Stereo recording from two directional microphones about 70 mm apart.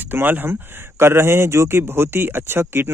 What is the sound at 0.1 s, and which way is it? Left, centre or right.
Speech, right.